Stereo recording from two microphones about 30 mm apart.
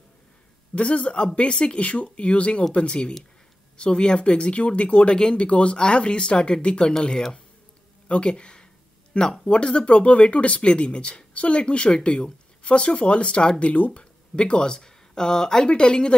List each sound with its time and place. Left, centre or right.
0.7 s speech: left
1.8 s speech: left
5.1 s speech: left
5.4 s speech: left
8.3 s speech: left
13.9 s speech: left
14.8 s speech: centre